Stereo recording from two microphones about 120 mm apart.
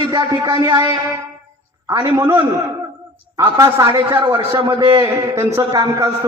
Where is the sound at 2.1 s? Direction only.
35° right (ahead or behind).